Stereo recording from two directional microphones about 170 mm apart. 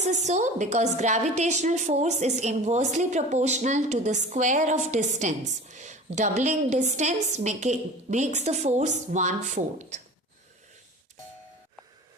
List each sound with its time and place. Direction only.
0.0 s a woman's voice: 45° right (ahead or behind)